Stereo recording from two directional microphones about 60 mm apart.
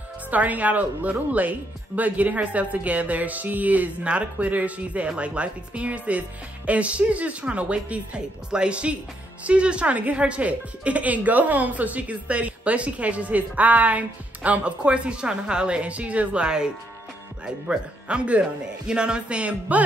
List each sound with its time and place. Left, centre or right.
0.3 s speech: right